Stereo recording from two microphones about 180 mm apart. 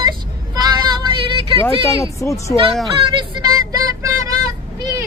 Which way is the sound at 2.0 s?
15° left (ahead or behind).